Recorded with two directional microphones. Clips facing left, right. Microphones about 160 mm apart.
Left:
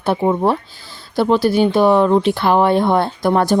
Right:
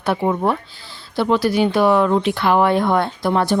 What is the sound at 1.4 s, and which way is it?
Speech, 30° left (ahead or behind).